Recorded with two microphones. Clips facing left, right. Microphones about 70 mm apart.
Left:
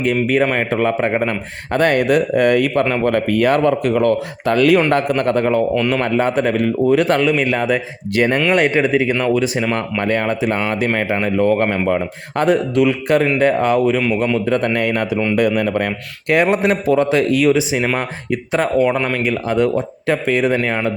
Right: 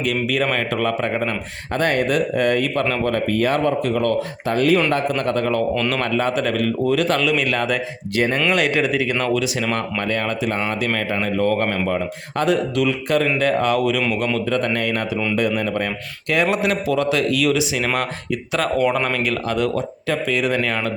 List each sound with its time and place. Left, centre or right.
0.0 s a man's voice: left
2.8 s speech: left
3.1 s speech: left
3.3 s a man's voice: left
5.1 s a man's voice: left
5.5 s a man's voice: centre
6.0 s a man's voice: left
8.1 s speech: left
8.5 s a man's voice: left
11.9 s speech: left
13.4 s a man's voice: left
17.3 s speech: left
20.1 s speech: left
20.6 s speech: left